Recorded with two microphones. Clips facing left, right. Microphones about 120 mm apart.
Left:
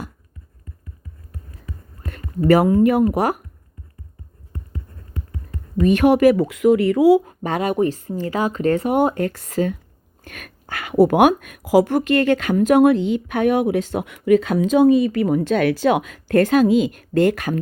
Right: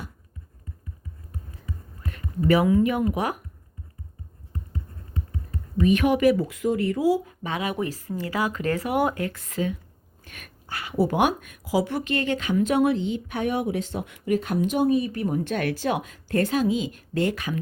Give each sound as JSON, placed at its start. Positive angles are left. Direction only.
{"t": 2.0, "sound": "speech", "side_deg": 45}
{"t": 5.8, "sound": "speech", "side_deg": 40}
{"t": 6.1, "sound": "speech", "side_deg": 65}
{"t": 7.3, "sound": "speech", "side_deg": 50}
{"t": 7.7, "sound": "speech", "side_deg": 30}
{"t": 10.2, "sound": "speech", "side_deg": 65}